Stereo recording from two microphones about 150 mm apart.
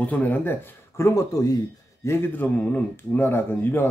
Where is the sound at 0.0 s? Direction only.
10° left (ahead or behind).